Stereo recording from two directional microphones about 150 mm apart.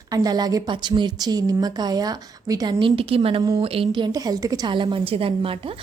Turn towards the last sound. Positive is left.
turn(degrees=-35)  # may be behind; listen again after turning